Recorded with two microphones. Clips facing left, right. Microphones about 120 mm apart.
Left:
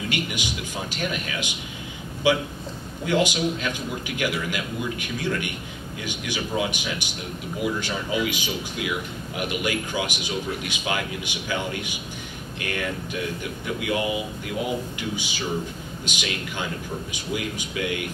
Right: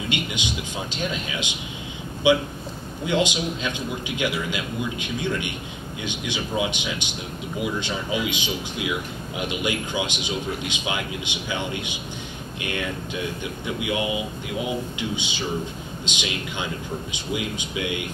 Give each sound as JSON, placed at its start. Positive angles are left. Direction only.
{"t": 0.1, "sound": "speech", "side_deg": -20}